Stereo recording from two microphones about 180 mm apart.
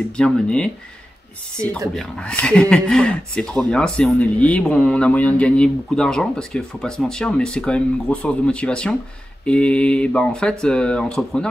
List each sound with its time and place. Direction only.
0.2 s speech: 5° left (ahead or behind)
1.6 s speech: 20° right (ahead or behind)
2.0 s speech: 5° left (ahead or behind)